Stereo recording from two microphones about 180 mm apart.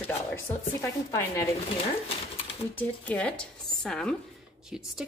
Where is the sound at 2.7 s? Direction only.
10° left (ahead or behind).